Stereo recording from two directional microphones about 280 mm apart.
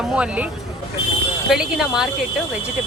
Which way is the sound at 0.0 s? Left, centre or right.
Centre.